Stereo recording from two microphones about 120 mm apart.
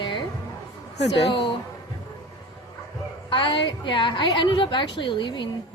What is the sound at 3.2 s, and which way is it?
A woman's voice, 45° left (ahead or behind).